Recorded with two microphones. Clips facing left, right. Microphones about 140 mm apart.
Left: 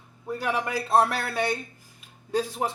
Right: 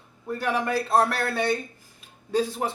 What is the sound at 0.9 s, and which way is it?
Speech, centre (ahead or behind).